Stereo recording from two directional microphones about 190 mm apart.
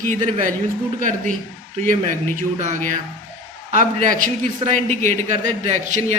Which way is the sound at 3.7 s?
40° right (ahead or behind).